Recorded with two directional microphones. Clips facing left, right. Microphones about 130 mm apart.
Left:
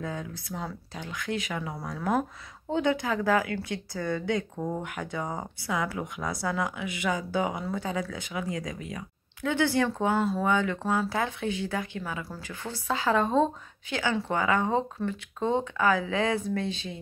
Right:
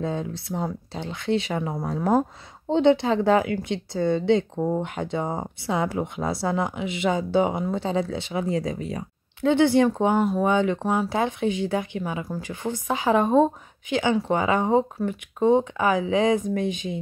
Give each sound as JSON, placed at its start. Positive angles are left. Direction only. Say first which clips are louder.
{"t": 0.0, "sound": "a woman's voice", "louder": "right 7 dB", "side_deg": -25}